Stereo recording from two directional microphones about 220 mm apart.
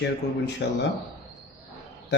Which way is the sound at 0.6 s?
50° left (ahead or behind).